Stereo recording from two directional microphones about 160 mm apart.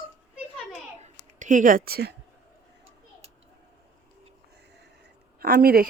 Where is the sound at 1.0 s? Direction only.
50° right (ahead or behind); by 2.1 s 75° right (ahead or behind).